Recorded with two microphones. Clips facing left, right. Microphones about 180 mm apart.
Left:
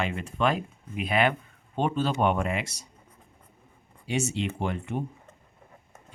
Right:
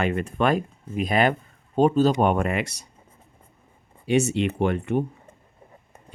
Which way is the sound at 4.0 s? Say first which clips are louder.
Right 7 dB; 60° right (ahead or behind).